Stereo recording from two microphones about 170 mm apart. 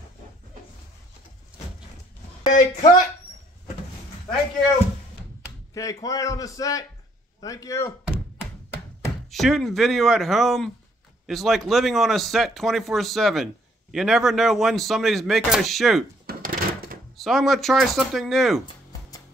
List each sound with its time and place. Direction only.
2.5 s speech: 45° left (ahead or behind)
5.8 s a man's voice: 20° left (ahead or behind)
9.3 s speech: centre (ahead or behind)
16.3 s a sound: 60° right (ahead or behind)
17.2 s speech: centre (ahead or behind)